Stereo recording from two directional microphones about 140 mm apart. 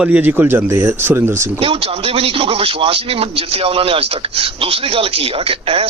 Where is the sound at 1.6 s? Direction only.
45° right (ahead or behind).